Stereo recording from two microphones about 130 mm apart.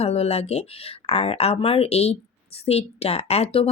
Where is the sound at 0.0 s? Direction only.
50° left (ahead or behind).